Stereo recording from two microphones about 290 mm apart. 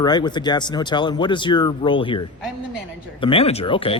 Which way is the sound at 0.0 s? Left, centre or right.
Centre.